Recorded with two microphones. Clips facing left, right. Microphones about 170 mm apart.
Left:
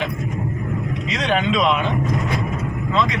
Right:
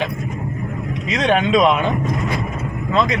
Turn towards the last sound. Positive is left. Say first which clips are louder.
# right 4 dB
turn(degrees=-45)  # may be behind; listen again after turning